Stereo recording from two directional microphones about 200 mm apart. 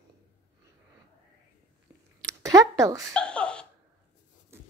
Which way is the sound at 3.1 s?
5° left (ahead or behind).